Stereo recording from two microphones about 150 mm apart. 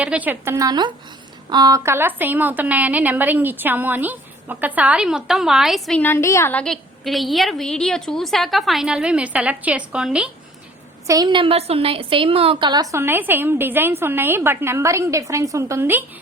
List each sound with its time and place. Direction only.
0.0 s a woman's voice: 10° right (ahead or behind)
6.0 s a woman's voice: 15° left (ahead or behind); by 10.3 s 5° right (ahead or behind)
11.0 s a woman's voice: 25° right (ahead or behind)